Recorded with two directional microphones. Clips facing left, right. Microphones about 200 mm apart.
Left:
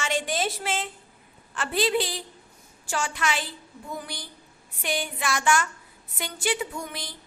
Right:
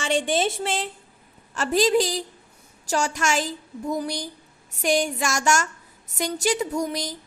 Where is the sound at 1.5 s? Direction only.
40° right (ahead or behind).